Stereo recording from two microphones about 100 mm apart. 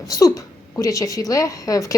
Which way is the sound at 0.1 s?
35° left (ahead or behind).